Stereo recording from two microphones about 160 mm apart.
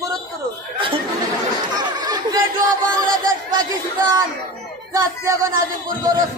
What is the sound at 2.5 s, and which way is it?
Chant, 60° right (ahead or behind).